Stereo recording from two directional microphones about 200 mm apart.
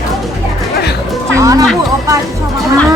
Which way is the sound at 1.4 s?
15° right (ahead or behind).